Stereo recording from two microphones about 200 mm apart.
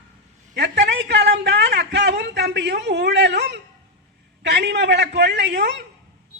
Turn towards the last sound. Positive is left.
turn(degrees=-60)  # may be behind; listen again after turning